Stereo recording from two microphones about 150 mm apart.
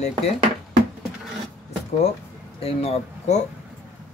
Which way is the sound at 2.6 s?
40° left (ahead or behind).